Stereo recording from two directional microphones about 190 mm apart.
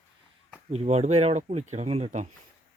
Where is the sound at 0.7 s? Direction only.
35° right (ahead or behind).